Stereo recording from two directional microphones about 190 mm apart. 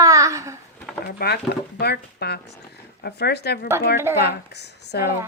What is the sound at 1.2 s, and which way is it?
Speech, 55° left (ahead or behind).